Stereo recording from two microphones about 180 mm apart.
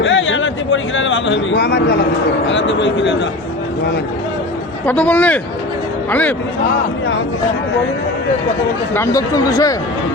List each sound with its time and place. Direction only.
0.0 s speech: 90° left; by 2.0 s 70° left (ahead or behind)
2.5 s a man's voice: 90° left
4.9 s a man's voice: 10° left (ahead or behind)
8.9 s speech: 15° left (ahead or behind)